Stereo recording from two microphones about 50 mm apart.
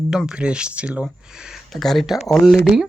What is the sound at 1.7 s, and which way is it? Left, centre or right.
Speech, centre.